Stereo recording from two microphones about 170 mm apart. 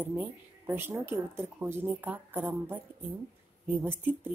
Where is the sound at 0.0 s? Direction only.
10° right (ahead or behind).